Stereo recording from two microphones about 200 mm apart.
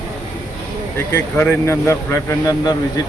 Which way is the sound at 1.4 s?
10° left (ahead or behind).